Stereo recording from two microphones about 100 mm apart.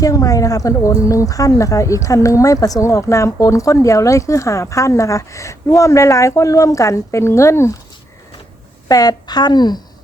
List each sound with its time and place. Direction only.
0.0 s speech: 35° left (ahead or behind)
8.9 s a woman's voice: 40° left (ahead or behind)